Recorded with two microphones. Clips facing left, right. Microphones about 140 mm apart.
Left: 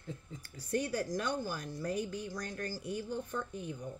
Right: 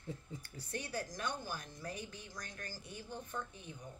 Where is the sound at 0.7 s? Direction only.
45° left (ahead or behind).